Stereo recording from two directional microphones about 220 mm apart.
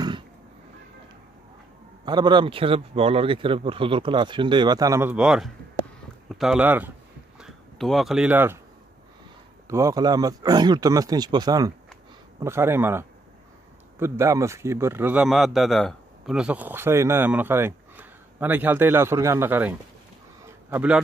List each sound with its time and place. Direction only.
2.0 s speech: 20° right (ahead or behind)
9.7 s a man's voice: 15° right (ahead or behind)
20.7 s a man's voice: 5° right (ahead or behind)